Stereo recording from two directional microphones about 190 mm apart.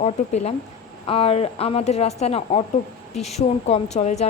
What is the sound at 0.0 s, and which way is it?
A woman's voice, 35° left (ahead or behind).